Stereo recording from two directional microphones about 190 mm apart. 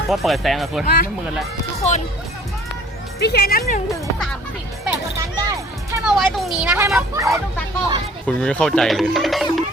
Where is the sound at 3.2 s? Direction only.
55° left (ahead or behind).